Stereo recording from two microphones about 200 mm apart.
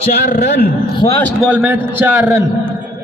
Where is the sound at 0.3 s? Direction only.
40° left (ahead or behind).